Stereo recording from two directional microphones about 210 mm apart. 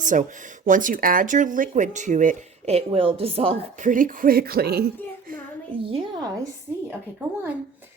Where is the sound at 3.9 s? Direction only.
40° right (ahead or behind).